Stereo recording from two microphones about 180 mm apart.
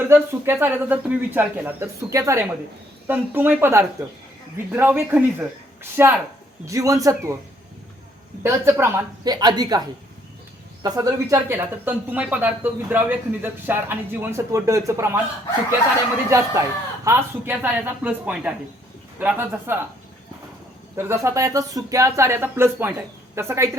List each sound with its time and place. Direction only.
0.1 s speech: 15° right (ahead or behind)
8.4 s a woman's voice: 15° right (ahead or behind)
10.8 s speech: 20° right (ahead or behind)
16.3 s speech: 15° right (ahead or behind)
20.9 s speech: 15° right (ahead or behind)